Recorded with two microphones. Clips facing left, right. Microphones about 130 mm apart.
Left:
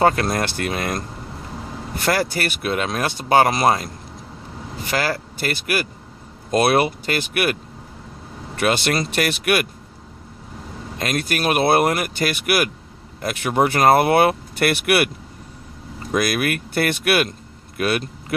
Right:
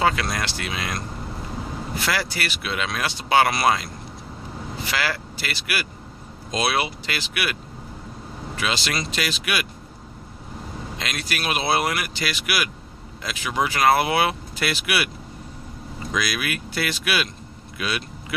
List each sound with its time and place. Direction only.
0.0 s speech: 45° left (ahead or behind)
2.0 s speech: 50° left (ahead or behind)
4.9 s speech: 40° left (ahead or behind)
8.5 s speech: 55° left (ahead or behind)
10.9 s speech: 50° left (ahead or behind)
16.1 s speech: 50° left (ahead or behind)